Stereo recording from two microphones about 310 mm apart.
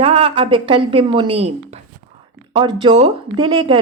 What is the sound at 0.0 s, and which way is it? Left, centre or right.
Speech, centre.